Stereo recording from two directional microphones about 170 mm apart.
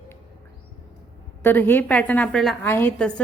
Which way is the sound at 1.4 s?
10° left (ahead or behind).